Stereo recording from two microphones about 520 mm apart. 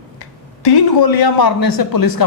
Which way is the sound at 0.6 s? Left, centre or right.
Left.